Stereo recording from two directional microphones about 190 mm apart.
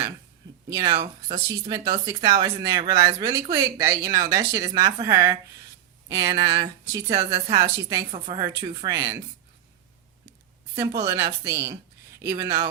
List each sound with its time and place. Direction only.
0.7 s speech: 20° right (ahead or behind)
10.8 s speech: 15° right (ahead or behind)